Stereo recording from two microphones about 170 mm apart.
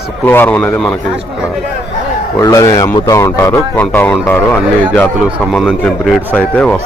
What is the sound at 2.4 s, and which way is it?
Speech, 20° left (ahead or behind).